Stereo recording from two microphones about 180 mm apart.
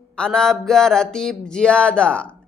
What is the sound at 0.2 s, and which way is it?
Speech, 5° left (ahead or behind).